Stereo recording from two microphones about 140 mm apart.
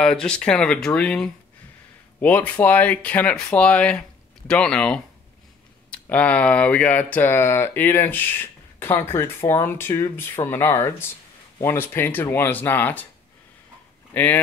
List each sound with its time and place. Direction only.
0.0 s speech: 5° left (ahead or behind)
14.1 s speech: 15° left (ahead or behind)